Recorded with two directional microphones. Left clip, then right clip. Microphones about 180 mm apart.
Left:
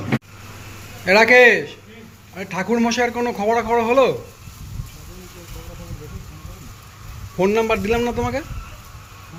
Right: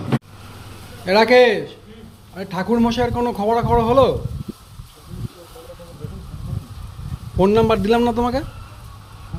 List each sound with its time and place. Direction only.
1.0 s a man's voice: 10° right (ahead or behind)
7.3 s a man's voice: 35° right (ahead or behind)